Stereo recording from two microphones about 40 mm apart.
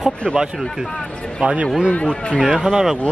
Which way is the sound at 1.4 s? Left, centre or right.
Right.